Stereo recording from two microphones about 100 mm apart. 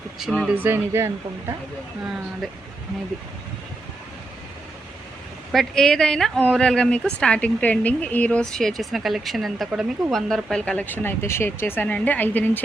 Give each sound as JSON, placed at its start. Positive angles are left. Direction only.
{"t": 0.2, "sound": "speech", "side_deg": 0}
{"t": 0.5, "sound": "speech", "side_deg": -20}
{"t": 5.5, "sound": "speech", "side_deg": 5}